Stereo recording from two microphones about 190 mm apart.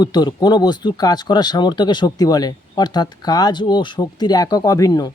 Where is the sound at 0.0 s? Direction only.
20° left (ahead or behind).